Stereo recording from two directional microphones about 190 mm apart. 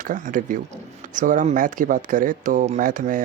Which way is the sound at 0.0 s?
45° right (ahead or behind).